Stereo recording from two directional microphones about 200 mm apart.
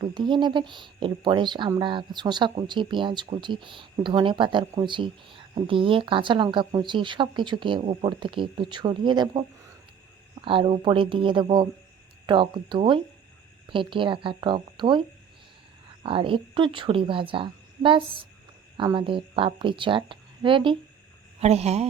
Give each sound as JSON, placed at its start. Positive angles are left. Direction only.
{"t": 0.0, "sound": "speech", "side_deg": -25}
{"t": 10.4, "sound": "speech", "side_deg": -25}
{"t": 16.0, "sound": "speech", "side_deg": -25}